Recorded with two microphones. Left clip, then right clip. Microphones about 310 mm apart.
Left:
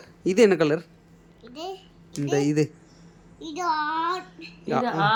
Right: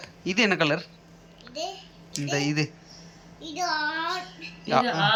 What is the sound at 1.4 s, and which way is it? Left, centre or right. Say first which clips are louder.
Babbling: right 3 dB; centre.